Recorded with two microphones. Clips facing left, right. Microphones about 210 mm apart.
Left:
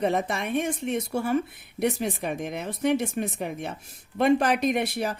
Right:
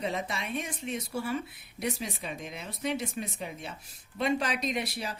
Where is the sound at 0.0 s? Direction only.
55° left (ahead or behind).